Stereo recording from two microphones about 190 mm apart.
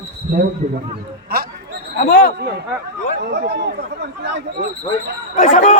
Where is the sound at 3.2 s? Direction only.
60° right (ahead or behind).